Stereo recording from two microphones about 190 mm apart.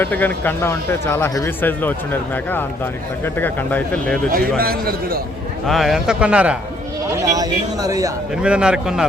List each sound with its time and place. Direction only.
0.0 s speech: 10° left (ahead or behind)
4.3 s a man's voice: 50° right (ahead or behind)
5.6 s a man's voice: centre (ahead or behind)
7.3 s speech: 20° right (ahead or behind)
8.4 s a man's voice: 5° right (ahead or behind)